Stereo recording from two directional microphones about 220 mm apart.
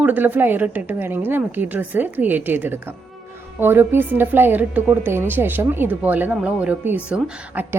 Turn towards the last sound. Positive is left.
turn(degrees=-5)  # may be behind; listen again after turning